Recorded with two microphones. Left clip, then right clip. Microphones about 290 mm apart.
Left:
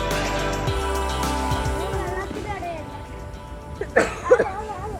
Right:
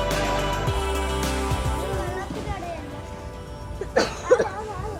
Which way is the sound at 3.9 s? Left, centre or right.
Left.